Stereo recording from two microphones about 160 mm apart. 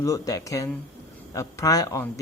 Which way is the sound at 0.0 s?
20° left (ahead or behind).